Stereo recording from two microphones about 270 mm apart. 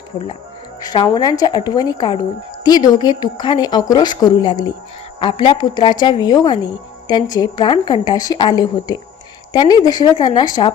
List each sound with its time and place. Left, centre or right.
0.8 s speech: centre